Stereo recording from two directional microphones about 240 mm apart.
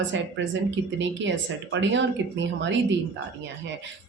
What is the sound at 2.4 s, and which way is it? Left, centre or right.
Speech, right.